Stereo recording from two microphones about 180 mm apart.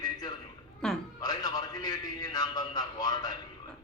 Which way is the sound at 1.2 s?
20° left (ahead or behind).